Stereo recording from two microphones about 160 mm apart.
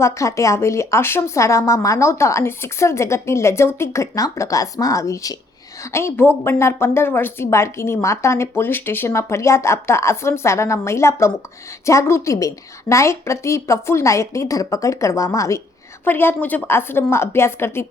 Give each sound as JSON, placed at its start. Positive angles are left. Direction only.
{"t": 0.0, "sound": "speech", "side_deg": 20}